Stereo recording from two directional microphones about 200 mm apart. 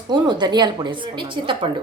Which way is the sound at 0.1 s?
20° right (ahead or behind).